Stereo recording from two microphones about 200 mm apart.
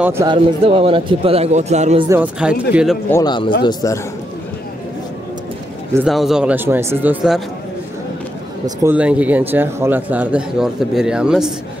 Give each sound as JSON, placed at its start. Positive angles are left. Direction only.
{"t": 0.0, "sound": "speech", "side_deg": -10}
{"t": 0.3, "sound": "speech", "side_deg": -25}
{"t": 2.0, "sound": "speech", "side_deg": -10}
{"t": 3.1, "sound": "a man's voice", "side_deg": 20}
{"t": 6.0, "sound": "speech", "side_deg": 0}
{"t": 8.6, "sound": "speech", "side_deg": -10}